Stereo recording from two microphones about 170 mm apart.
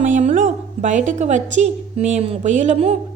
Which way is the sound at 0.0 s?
45° right (ahead or behind).